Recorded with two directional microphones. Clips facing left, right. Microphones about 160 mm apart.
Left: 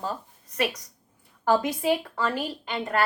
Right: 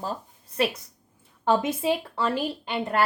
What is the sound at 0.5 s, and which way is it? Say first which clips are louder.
Speech: right 2 dB; 30° right (ahead or behind).